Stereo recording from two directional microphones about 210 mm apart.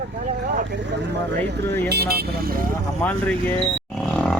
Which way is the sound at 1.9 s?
50° right (ahead or behind).